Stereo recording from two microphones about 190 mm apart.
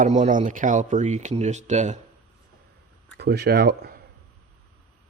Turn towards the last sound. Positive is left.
turn(degrees=-55)  # may be behind; listen again after turning